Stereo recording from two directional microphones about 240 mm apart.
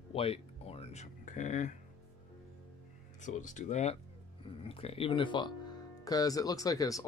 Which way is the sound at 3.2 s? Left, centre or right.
Left.